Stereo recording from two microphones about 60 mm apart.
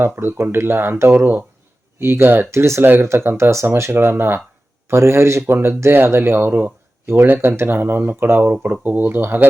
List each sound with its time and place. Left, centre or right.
0.0 s speech: right
2.5 s speech: right
2.8 s speech: right